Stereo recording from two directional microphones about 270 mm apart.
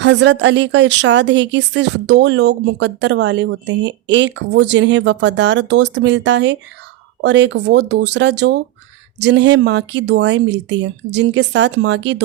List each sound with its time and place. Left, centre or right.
0.0 s a woman's voice: right